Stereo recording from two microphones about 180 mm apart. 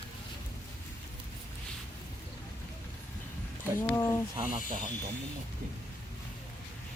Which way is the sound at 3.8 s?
15° left (ahead or behind).